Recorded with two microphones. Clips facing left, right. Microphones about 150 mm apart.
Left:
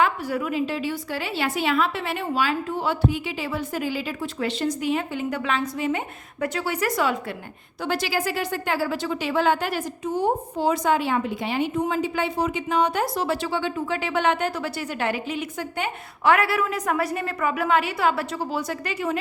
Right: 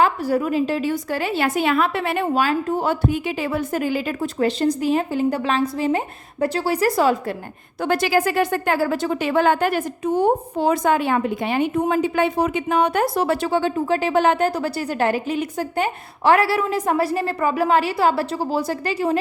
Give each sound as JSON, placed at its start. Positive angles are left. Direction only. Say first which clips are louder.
{"t": 0.0, "sound": "a woman's voice", "louder": "right 4 dB", "side_deg": -35}
{"t": 7.8, "sound": "speech", "louder": "right 6 dB", "side_deg": -50}